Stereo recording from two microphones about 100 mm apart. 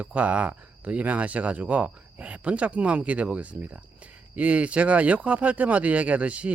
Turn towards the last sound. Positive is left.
turn(degrees=-15)  # may be behind; listen again after turning